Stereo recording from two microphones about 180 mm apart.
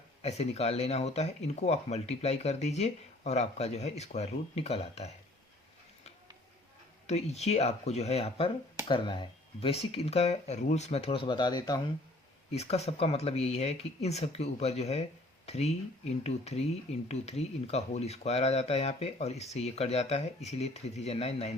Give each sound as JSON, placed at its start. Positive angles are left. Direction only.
{"t": 0.2, "sound": "speech", "side_deg": 35}
{"t": 7.1, "sound": "speech", "side_deg": 35}
{"t": 12.5, "sound": "speech", "side_deg": 35}